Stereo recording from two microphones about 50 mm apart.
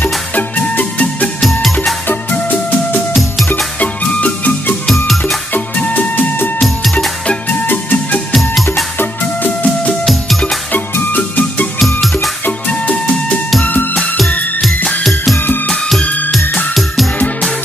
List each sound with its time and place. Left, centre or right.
0.0 s music: left
3.1 s music: centre
3.8 s music: left
6.6 s music: centre
7.6 s music: left
8.3 s music: centre
8.9 s music: left
11.8 s music: centre
12.4 s music: left
16.0 s music: left
16.5 s music: centre